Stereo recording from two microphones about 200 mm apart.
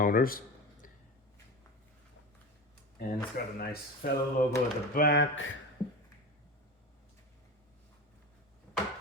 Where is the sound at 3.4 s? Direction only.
45° left (ahead or behind).